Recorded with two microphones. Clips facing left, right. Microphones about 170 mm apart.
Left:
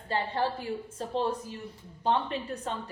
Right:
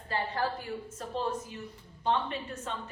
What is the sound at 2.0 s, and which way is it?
Speech, 35° left (ahead or behind).